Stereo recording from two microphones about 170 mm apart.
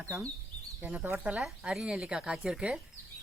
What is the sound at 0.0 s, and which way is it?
Speech, 15° right (ahead or behind).